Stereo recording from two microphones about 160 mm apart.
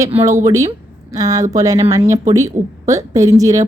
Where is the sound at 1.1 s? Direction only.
20° right (ahead or behind).